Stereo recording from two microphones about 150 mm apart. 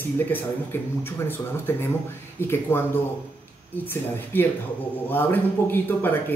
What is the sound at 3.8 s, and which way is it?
Speech, 15° left (ahead or behind).